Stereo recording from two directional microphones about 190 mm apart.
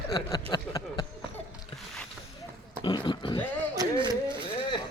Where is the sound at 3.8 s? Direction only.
20° right (ahead or behind).